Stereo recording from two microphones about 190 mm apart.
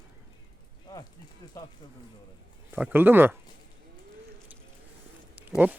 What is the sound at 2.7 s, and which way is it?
Speech, 10° right (ahead or behind).